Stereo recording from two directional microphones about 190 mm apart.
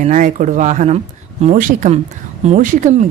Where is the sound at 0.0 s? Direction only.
40° right (ahead or behind).